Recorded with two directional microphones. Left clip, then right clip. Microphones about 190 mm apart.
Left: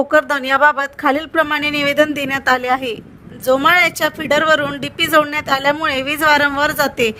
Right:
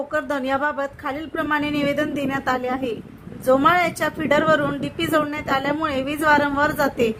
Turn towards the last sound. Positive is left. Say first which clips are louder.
# left 4 dB
turn(degrees=50)  # may be behind; listen again after turning